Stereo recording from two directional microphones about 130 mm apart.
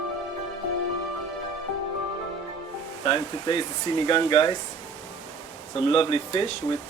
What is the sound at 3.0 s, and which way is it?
Speech, 40° left (ahead or behind).